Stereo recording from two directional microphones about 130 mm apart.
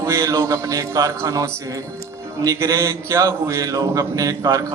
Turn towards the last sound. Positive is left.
turn(degrees=-25)  # may be behind; listen again after turning